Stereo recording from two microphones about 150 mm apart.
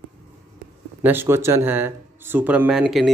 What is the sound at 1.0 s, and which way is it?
Speech, 15° right (ahead or behind).